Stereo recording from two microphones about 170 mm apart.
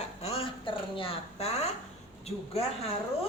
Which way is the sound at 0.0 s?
40° left (ahead or behind).